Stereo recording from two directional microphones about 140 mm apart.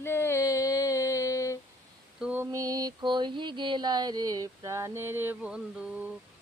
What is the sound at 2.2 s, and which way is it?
Mantra, 10° right (ahead or behind).